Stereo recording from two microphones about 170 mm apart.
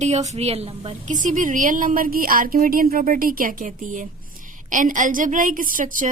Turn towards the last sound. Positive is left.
turn(degrees=-50)  # may be behind; listen again after turning